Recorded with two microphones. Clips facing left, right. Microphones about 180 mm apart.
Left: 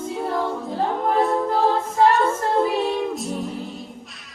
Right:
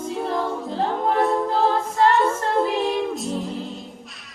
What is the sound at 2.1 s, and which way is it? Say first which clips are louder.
Female singing: even; centre (ahead or behind).